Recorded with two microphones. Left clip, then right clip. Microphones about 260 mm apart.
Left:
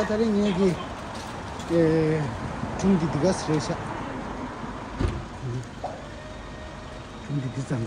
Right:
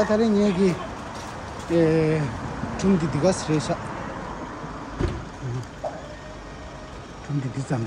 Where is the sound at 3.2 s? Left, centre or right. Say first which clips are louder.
Right 3 dB; centre.